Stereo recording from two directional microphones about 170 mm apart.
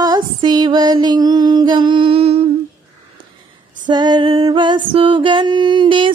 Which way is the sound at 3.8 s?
25° right (ahead or behind).